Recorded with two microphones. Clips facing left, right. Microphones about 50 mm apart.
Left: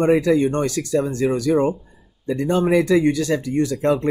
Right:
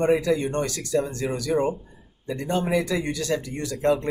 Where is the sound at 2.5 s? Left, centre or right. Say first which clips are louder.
Left 7 dB; left.